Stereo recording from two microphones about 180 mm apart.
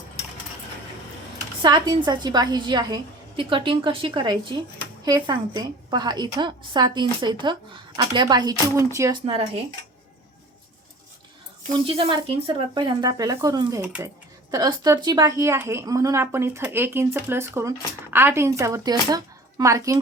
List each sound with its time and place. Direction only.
1.6 s a woman's voice: 25° right (ahead or behind)
11.9 s a woman's voice: 30° right (ahead or behind)